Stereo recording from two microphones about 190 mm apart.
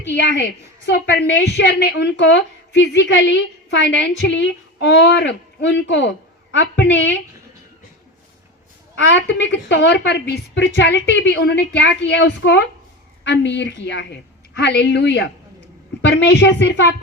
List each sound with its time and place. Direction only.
0.1 s a woman's voice: 65° left (ahead or behind)
9.0 s a woman's voice: 80° left